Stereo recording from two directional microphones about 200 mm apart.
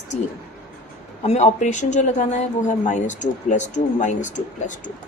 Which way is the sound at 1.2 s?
35° left (ahead or behind).